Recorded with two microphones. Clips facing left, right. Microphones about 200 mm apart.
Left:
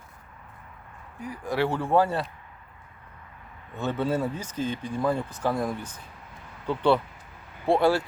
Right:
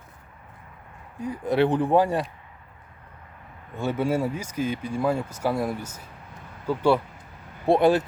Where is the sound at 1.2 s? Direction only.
20° right (ahead or behind).